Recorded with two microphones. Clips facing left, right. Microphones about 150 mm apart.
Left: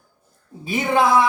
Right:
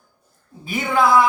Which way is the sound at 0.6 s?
20° left (ahead or behind).